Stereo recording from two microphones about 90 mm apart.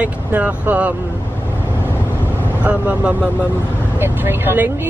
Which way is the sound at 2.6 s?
15° right (ahead or behind).